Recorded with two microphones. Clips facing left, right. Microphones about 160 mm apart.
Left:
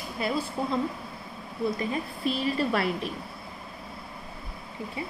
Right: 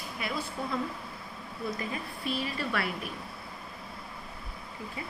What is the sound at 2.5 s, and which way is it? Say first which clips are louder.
Speech: left 6 dB; 30° left (ahead or behind).